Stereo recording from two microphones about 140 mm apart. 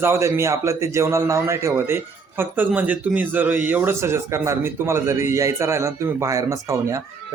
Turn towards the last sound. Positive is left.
turn(degrees=-20)  # may be behind; listen again after turning